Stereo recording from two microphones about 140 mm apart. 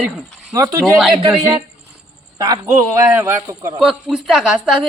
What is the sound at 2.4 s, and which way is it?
A man's voice, 25° right (ahead or behind).